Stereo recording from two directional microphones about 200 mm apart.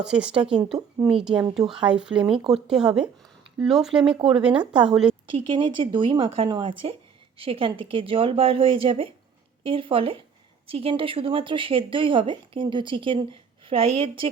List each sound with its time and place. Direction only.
0.0 s a woman's voice: 5° right (ahead or behind)
5.5 s speech: 25° right (ahead or behind)